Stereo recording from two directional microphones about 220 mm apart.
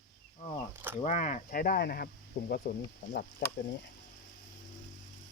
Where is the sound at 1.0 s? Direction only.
35° left (ahead or behind).